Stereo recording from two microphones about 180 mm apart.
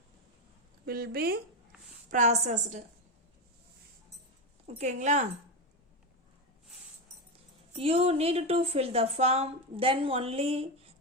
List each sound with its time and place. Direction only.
0.9 s speech: 60° right (ahead or behind)
2.0 s a woman's voice: 40° right (ahead or behind)
4.6 s a woman's voice: 40° right (ahead or behind)
7.8 s a woman's voice: 35° right (ahead or behind)